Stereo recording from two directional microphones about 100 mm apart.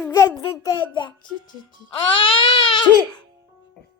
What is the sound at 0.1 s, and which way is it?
Speech, 35° left (ahead or behind).